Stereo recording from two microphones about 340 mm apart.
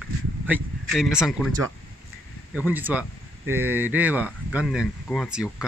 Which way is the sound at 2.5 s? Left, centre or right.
Centre.